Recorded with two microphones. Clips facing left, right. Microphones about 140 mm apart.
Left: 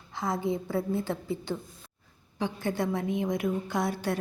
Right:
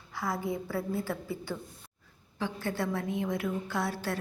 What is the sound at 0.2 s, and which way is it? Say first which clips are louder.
A woman's voice: left 3 dB; 20° left (ahead or behind).